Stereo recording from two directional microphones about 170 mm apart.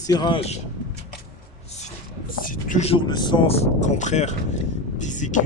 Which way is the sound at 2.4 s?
55° left (ahead or behind).